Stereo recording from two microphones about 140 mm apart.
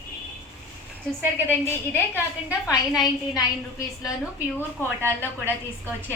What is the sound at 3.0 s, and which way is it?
Speech, 25° left (ahead or behind).